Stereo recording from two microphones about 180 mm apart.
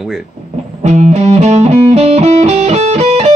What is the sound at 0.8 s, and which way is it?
Music, 40° right (ahead or behind).